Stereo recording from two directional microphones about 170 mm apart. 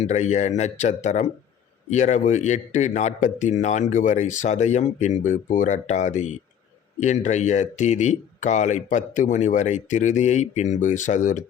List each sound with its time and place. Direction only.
0.0 s speech: 40° left (ahead or behind)